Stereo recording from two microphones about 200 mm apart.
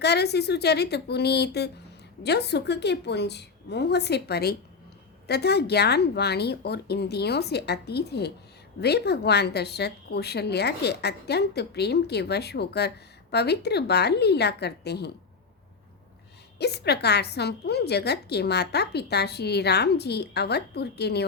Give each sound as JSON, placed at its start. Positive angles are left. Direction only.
{"t": 0.0, "sound": "a woman's voice", "side_deg": 55}
{"t": 16.6, "sound": "a woman's voice", "side_deg": 55}